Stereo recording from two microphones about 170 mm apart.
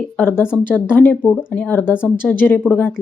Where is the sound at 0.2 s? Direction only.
10° left (ahead or behind).